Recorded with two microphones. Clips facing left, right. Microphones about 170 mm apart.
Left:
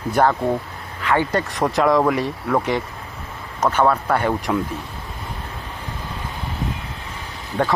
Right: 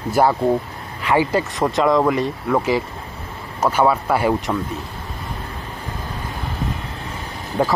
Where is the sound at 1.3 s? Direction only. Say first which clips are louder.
Right 1 dB; centre (ahead or behind).